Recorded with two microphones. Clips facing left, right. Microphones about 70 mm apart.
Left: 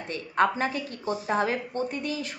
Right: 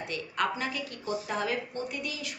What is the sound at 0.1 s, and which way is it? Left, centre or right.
A woman's voice, left.